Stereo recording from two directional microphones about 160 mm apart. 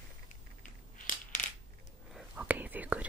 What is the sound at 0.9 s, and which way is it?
Crushing, 55° left (ahead or behind).